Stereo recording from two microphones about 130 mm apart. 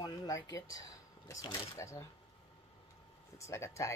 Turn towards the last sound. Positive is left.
turn(degrees=20)  # may be behind; listen again after turning